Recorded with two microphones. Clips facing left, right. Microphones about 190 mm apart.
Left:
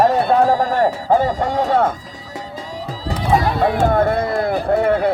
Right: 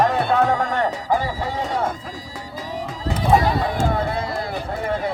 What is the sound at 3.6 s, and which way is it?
Speech, 55° left (ahead or behind).